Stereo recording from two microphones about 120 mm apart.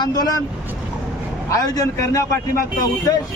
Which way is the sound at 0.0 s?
30° left (ahead or behind).